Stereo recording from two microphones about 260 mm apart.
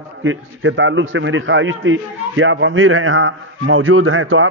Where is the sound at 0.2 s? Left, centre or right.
Right.